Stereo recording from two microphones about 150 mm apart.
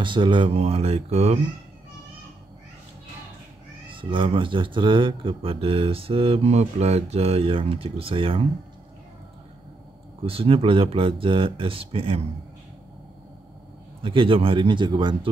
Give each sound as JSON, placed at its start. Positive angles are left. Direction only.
{"t": 0.0, "sound": "speech", "side_deg": -35}
{"t": 3.9, "sound": "speech", "side_deg": -35}
{"t": 10.2, "sound": "speech", "side_deg": -40}
{"t": 14.0, "sound": "speech", "side_deg": -35}